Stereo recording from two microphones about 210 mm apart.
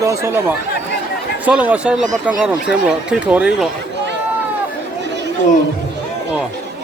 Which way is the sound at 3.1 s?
5° right (ahead or behind).